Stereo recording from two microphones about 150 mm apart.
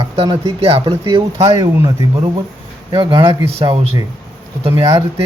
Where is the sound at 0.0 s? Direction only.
40° right (ahead or behind).